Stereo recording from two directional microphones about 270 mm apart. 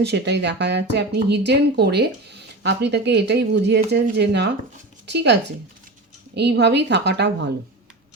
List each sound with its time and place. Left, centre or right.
0.0 s speech: right